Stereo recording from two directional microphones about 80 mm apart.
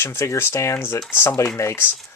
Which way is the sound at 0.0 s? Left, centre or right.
Left.